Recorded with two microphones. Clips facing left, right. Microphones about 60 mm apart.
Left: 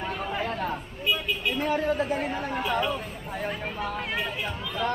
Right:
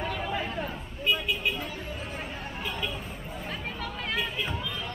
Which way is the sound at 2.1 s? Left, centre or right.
Left.